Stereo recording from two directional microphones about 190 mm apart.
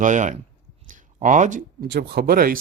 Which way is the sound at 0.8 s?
45° right (ahead or behind).